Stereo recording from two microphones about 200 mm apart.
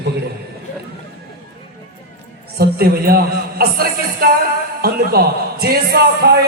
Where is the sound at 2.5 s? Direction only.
50° right (ahead or behind).